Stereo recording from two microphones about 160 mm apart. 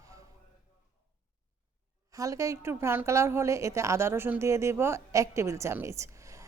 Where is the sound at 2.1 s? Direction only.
20° right (ahead or behind).